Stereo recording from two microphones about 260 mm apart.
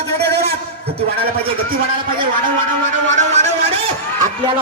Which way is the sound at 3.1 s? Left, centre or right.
Right.